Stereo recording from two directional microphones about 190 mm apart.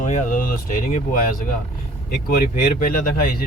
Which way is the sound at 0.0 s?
45° left (ahead or behind).